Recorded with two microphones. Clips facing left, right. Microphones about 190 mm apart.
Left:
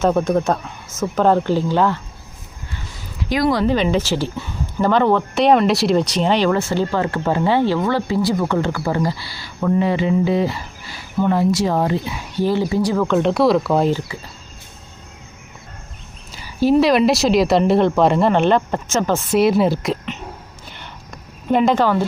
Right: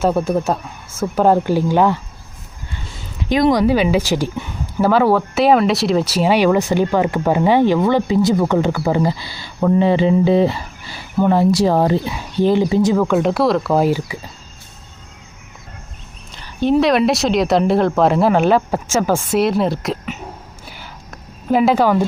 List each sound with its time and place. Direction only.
0.0 s speech: 5° right (ahead or behind)
3.2 s speech: 20° right (ahead or behind)
9.6 s speech: 30° right (ahead or behind)
12.5 s speech: 20° right (ahead or behind)
16.3 s speech: 5° left (ahead or behind)
20.7 s a sound: 5° right (ahead or behind)